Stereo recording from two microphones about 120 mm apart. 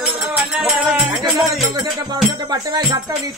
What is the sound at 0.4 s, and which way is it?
Music, centre (ahead or behind).